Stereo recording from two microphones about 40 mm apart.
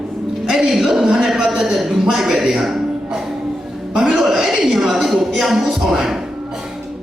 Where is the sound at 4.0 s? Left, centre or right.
Centre.